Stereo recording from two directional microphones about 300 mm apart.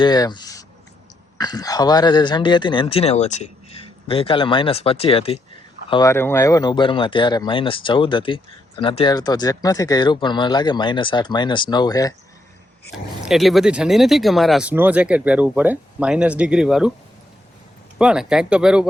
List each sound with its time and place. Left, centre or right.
0.0 s speech: centre
13.2 s speech: centre
17.9 s speech: centre